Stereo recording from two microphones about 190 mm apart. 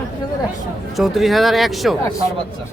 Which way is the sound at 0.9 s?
Centre (ahead or behind).